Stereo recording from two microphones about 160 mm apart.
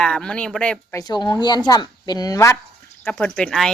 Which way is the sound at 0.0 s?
5° left (ahead or behind).